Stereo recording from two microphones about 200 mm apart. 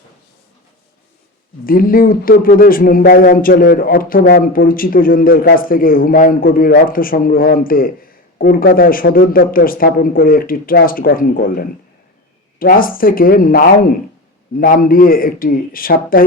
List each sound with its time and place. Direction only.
1.6 s speech: 45° left (ahead or behind)